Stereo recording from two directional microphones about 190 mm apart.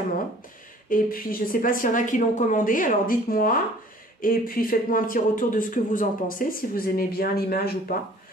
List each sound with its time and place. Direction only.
0.8 s speech: 45° left (ahead or behind)